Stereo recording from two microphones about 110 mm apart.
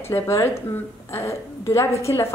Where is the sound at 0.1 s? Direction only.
25° left (ahead or behind).